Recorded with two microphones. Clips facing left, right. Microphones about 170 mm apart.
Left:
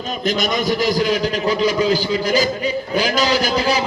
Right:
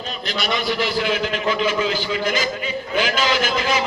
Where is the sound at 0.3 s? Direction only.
45° left (ahead or behind).